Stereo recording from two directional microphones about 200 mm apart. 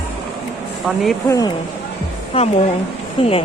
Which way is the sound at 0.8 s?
Centre (ahead or behind).